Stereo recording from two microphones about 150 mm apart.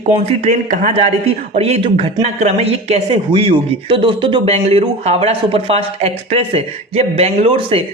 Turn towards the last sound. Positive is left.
turn(degrees=-40)  # may be behind; listen again after turning